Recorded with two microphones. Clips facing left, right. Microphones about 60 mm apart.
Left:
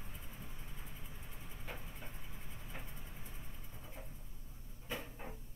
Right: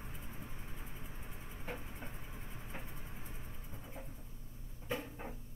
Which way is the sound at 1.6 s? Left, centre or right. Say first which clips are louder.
Right 4 dB; right.